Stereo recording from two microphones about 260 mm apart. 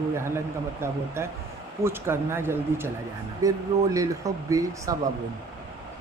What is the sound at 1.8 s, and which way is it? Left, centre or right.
Speech, centre.